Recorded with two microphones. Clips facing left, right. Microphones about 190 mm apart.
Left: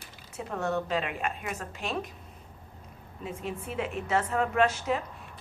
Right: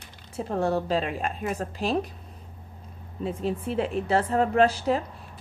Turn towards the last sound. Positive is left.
turn(degrees=-35)  # may be behind; listen again after turning